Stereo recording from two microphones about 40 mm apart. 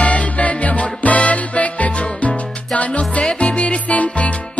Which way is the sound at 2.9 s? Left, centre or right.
Left.